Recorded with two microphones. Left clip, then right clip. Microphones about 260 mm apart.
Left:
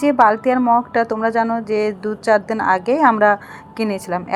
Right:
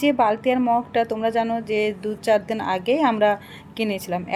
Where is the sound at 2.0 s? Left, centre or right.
Centre.